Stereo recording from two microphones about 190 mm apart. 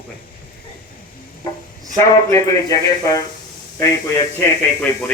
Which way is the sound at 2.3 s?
20° left (ahead or behind).